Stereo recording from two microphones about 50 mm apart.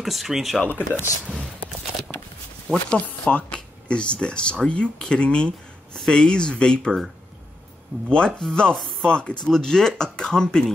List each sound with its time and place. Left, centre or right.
0.0 s speech: centre
0.7 s speech: left
2.7 s speech: left
8.1 s speech: centre
8.7 s speech: centre
9.1 s speech: centre